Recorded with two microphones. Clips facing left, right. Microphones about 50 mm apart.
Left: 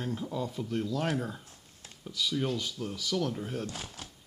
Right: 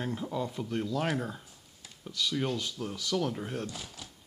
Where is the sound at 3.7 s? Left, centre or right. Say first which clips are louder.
Left 2 dB; left.